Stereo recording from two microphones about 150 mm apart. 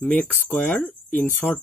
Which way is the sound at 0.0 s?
10° left (ahead or behind).